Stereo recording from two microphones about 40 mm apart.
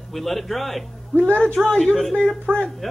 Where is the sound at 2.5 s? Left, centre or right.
Right.